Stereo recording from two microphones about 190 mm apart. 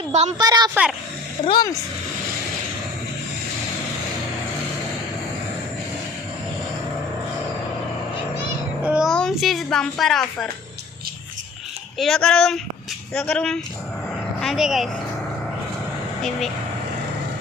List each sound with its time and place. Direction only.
0.1 s a woman's voice: 35° right (ahead or behind)
0.3 s a woman's voice: 20° right (ahead or behind)
0.7 s speech: 5° right (ahead or behind)
1.5 s speech: 20° left (ahead or behind)
8.8 s a child's voice: 5° right (ahead or behind)
11.9 s speech: centre (ahead or behind)